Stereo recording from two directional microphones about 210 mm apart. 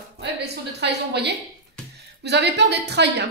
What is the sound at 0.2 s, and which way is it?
A woman's voice, 50° right (ahead or behind).